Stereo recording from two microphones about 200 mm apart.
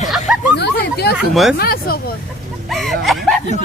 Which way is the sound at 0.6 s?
55° left (ahead or behind).